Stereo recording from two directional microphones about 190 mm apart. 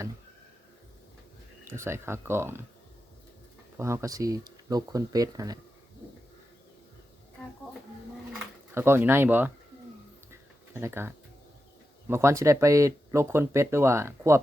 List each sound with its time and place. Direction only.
1.6 s speech: 15° right (ahead or behind)
3.8 s speech: 15° right (ahead or behind)
8.3 s pigeon: 10° right (ahead or behind)
10.8 s speech: 15° right (ahead or behind)